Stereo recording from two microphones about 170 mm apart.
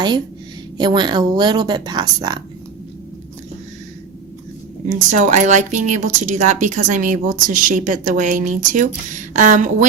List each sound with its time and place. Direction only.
0.8 s speech: 25° right (ahead or behind)
4.9 s speech: 45° right (ahead or behind)